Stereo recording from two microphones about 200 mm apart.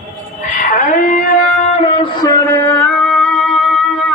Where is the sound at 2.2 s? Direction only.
15° left (ahead or behind); by 3.8 s centre (ahead or behind).